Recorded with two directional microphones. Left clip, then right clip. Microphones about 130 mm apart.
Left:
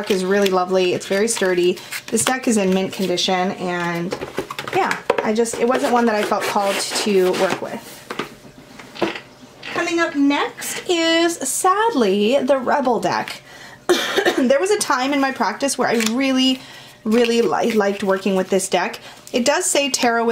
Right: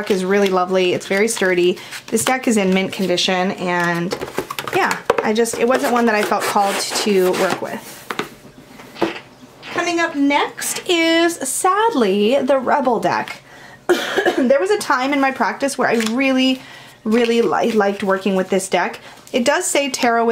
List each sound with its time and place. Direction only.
0.0 s speech: 5° right (ahead or behind)
8.1 s a sound: 35° right (ahead or behind)
11.1 s speech: centre (ahead or behind)
13.8 s speech: 15° left (ahead or behind); by 20.2 s centre (ahead or behind)